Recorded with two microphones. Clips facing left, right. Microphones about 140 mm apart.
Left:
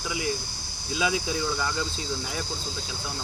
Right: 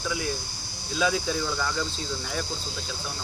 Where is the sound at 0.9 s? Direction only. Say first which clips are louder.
Right 1 dB; 10° left (ahead or behind).